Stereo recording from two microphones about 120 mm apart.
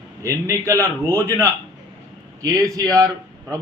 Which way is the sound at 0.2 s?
25° right (ahead or behind).